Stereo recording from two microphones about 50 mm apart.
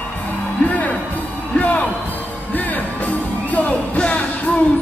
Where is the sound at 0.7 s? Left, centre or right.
Left.